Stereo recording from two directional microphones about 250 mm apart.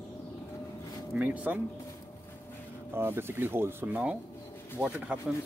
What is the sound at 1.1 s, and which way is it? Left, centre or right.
Speech, centre.